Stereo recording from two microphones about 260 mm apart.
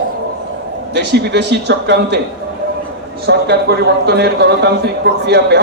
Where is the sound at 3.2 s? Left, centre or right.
Right.